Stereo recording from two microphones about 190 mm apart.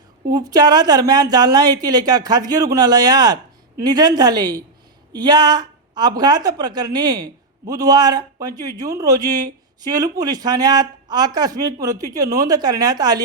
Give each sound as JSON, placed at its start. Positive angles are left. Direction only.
{"t": 0.3, "sound": "a man's voice", "side_deg": -20}